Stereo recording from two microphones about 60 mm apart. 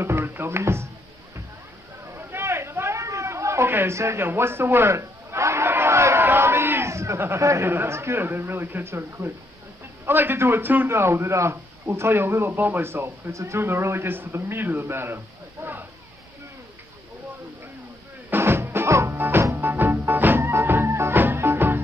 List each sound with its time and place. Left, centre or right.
0.0 s music: right
2.1 s a sound: right
4.3 s speech: right
4.9 s a sound: right
6.2 s a sound: right
7.6 s speech: right
10.9 s a man's voice: right
12.8 s speech: right
13.3 s speech: right
13.6 s speech: right
15.6 s a sound: right
18.3 s music: right
19.1 s music: right